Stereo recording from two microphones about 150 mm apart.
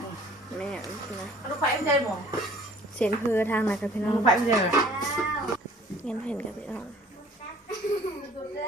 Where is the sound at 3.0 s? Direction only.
15° left (ahead or behind).